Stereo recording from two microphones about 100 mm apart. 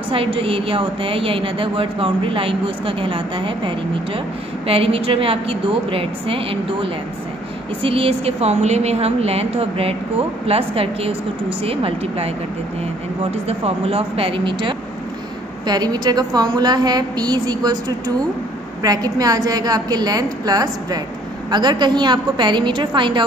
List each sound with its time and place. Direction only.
0.1 s a woman's voice: 65° right (ahead or behind)
4.6 s a woman's voice: 75° right (ahead or behind)
13.3 s a woman's voice: 90° right; by 14.8 s 55° right (ahead or behind)
15.6 s a woman's voice: 40° right (ahead or behind)